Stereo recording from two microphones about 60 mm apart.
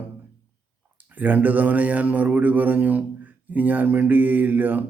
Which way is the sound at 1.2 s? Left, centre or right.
Right.